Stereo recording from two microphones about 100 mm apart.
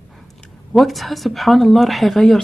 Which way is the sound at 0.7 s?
Centre (ahead or behind).